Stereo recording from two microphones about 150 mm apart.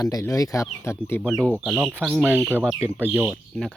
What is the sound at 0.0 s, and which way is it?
Speech, 20° left (ahead or behind).